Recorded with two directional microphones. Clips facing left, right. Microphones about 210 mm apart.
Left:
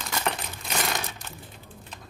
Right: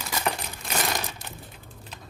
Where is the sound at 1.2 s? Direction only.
15° right (ahead or behind).